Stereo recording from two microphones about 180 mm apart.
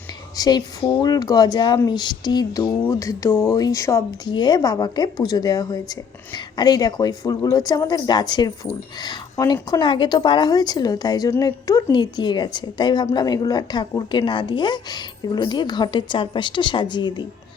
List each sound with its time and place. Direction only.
0.3 s a woman's voice: 20° left (ahead or behind)